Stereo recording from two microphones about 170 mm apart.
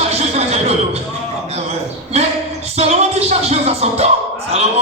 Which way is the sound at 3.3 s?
40° right (ahead or behind).